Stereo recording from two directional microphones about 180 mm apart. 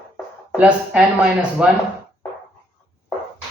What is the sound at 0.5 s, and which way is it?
Speech, 5° right (ahead or behind).